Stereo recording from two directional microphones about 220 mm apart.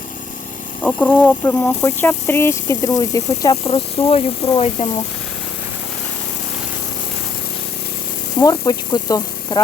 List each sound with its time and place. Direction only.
0.8 s speech: 5° left (ahead or behind)
3.5 s speech: 25° left (ahead or behind)
8.4 s speech: 20° left (ahead or behind)